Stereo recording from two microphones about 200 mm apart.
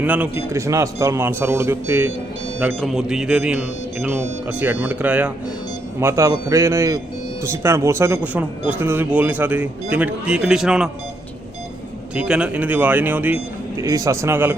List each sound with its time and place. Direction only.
0.0 s speech: 10° right (ahead or behind)
12.1 s speech: 5° right (ahead or behind)